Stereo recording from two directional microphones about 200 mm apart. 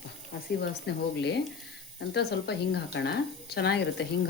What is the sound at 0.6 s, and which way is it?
Speech, 60° left (ahead or behind).